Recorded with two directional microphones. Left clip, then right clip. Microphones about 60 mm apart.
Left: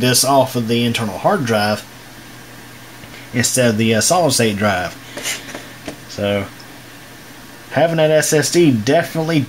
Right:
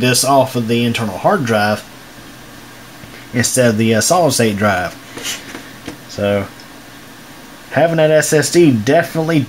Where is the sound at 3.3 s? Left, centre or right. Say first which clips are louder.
Right 2 dB; centre.